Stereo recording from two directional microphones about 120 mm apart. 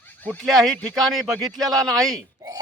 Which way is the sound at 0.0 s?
15° left (ahead or behind).